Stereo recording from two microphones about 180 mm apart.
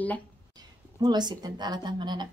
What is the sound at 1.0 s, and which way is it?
A woman's voice, 25° right (ahead or behind).